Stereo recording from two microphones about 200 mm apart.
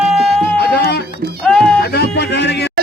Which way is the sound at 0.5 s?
55° left (ahead or behind).